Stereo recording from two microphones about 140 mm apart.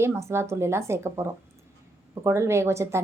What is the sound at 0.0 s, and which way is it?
A woman's voice, 20° right (ahead or behind).